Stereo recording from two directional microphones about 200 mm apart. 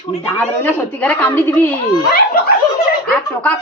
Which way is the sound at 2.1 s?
50° left (ahead or behind).